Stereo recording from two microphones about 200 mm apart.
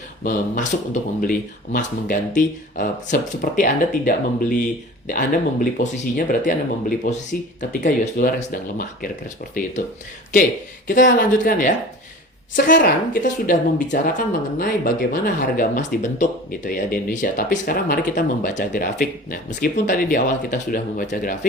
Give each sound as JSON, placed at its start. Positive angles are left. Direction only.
{"t": 0.2, "sound": "speech", "side_deg": 40}
{"t": 10.8, "sound": "speech", "side_deg": 40}